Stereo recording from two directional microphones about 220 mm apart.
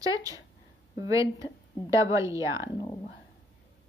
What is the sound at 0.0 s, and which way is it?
A woman's voice, 15° right (ahead or behind).